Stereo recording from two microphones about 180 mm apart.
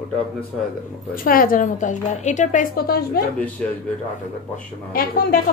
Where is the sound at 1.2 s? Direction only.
50° left (ahead or behind).